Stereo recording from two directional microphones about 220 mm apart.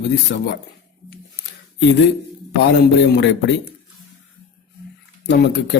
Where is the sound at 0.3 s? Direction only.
50° left (ahead or behind).